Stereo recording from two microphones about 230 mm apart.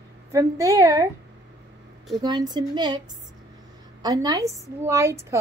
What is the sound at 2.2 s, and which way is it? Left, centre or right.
A woman's voice, centre.